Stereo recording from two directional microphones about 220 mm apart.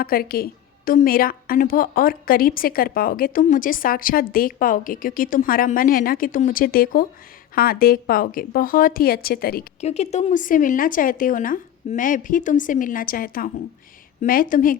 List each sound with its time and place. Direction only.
0.0 s a woman's voice: 40° left (ahead or behind)
9.8 s a woman's voice: 30° left (ahead or behind)